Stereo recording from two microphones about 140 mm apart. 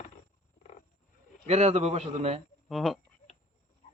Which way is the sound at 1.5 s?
50° right (ahead or behind).